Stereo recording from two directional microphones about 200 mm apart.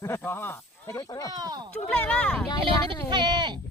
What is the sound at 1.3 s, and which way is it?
Speech, 20° right (ahead or behind).